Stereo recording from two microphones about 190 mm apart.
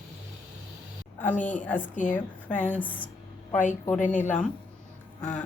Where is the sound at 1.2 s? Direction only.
10° left (ahead or behind).